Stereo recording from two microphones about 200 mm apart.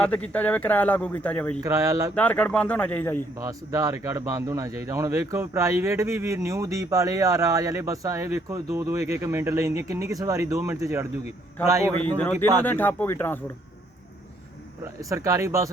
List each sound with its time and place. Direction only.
0.0 s speech: 5° left (ahead or behind)
1.6 s speech: 15° right (ahead or behind)
2.1 s speech: 5° left (ahead or behind)
3.4 s speech: 15° right (ahead or behind)
12.2 s speech: 10° left (ahead or behind)
15.1 s speech: 15° right (ahead or behind)